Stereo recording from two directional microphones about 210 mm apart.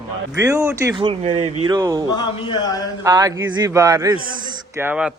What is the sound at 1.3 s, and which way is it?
Speech, 90° right.